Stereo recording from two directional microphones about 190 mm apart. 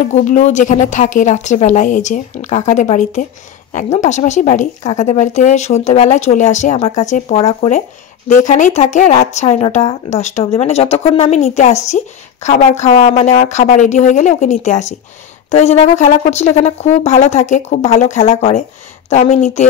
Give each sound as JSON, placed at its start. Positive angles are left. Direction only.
{"t": 0.1, "sound": "speech", "side_deg": 40}